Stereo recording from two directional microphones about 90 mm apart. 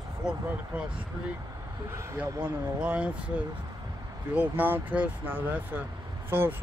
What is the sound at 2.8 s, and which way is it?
Speech, 15° right (ahead or behind).